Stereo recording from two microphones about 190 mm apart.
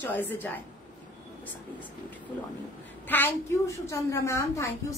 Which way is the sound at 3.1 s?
10° left (ahead or behind).